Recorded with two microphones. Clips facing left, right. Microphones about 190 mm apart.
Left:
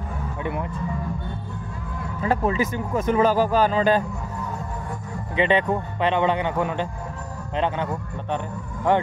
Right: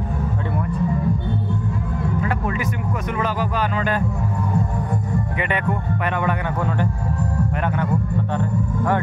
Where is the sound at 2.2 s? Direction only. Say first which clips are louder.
Left 2 dB; 30° left (ahead or behind).